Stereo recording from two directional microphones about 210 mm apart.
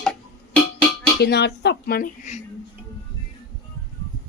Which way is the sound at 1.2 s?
50° left (ahead or behind).